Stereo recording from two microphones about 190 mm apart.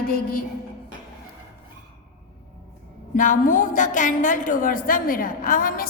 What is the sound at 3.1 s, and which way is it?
A woman's voice, 45° left (ahead or behind).